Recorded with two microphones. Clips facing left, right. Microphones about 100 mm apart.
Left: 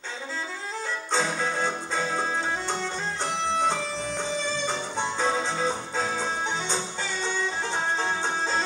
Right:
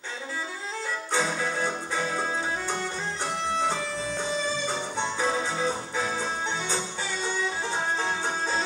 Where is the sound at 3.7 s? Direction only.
15° right (ahead or behind).